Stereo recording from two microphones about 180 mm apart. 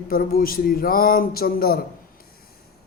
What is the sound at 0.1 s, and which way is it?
Speech, 50° left (ahead or behind).